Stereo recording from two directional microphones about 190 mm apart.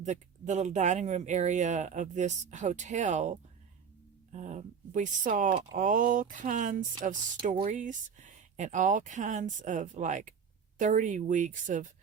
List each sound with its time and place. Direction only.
0.0 s speech: 40° right (ahead or behind)